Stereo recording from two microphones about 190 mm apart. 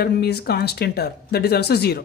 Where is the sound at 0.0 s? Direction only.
60° left (ahead or behind).